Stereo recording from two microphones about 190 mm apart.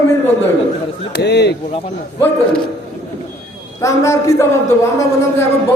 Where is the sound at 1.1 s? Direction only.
60° left (ahead or behind).